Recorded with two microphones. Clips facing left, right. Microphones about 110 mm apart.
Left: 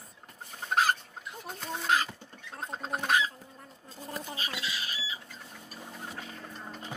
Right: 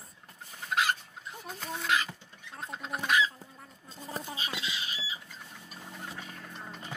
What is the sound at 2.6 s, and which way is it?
Chicken, 35° left (ahead or behind).